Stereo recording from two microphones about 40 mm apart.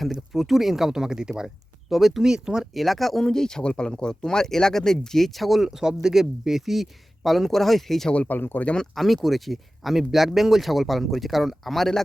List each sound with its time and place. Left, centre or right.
0.3 s speech: centre
1.9 s speech: centre
2.3 s speech: centre
2.7 s speech: centre
5.6 s speech: centre
8.3 s speech: left
9.0 s speech: centre